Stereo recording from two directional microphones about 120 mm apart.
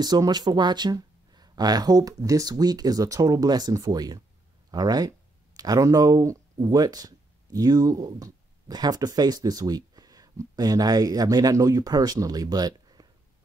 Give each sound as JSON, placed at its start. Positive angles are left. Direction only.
{"t": 0.0, "sound": "speech", "side_deg": -35}